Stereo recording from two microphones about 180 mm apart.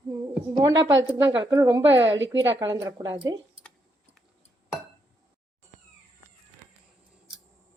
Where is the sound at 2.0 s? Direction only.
90° right.